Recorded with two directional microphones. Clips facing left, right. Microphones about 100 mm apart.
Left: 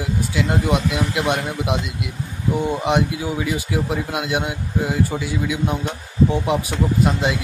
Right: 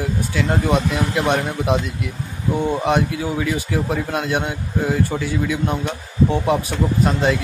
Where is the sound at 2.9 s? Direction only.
15° left (ahead or behind).